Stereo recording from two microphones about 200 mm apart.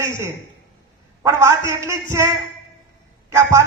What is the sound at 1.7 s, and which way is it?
Speech, 15° right (ahead or behind).